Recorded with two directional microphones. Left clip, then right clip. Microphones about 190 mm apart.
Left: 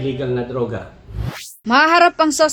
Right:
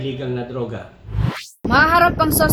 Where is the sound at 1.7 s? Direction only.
30° left (ahead or behind).